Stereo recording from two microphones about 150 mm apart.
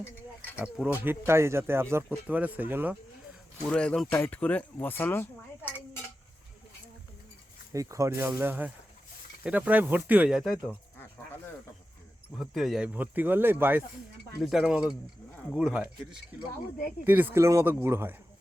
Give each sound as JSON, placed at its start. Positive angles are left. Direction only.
{"t": 0.6, "sound": "speech", "side_deg": -10}
{"t": 3.6, "sound": "speech", "side_deg": 5}
{"t": 7.7, "sound": "speech", "side_deg": -20}
{"t": 12.4, "sound": "speech", "side_deg": 0}
{"t": 14.4, "sound": "speech", "side_deg": 0}
{"t": 17.1, "sound": "speech", "side_deg": -15}